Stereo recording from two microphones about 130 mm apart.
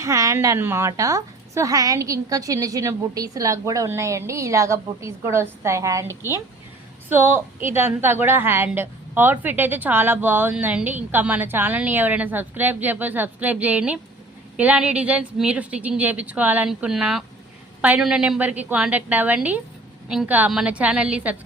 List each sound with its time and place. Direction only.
0.0 s a child's voice: 25° right (ahead or behind); by 21.3 s 10° right (ahead or behind)